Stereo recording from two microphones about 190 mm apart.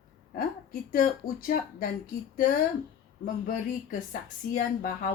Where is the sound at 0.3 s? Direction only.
45° left (ahead or behind).